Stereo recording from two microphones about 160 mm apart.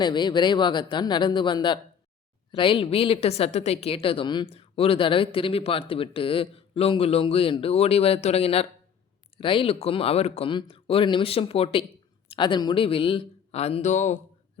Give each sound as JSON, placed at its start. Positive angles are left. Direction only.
{"t": 0.0, "sound": "a woman's voice", "side_deg": 30}